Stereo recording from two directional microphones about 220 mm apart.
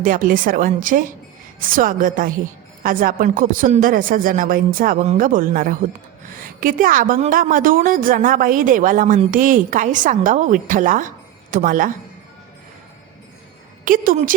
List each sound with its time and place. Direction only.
0.0 s a woman's voice: 40° right (ahead or behind)
13.8 s a woman's voice: 40° right (ahead or behind)